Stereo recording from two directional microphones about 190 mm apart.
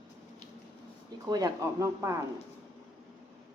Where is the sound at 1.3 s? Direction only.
20° right (ahead or behind).